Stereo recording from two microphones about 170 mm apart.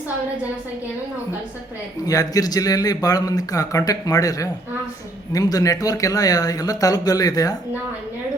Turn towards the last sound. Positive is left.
turn(degrees=20)  # may be behind; listen again after turning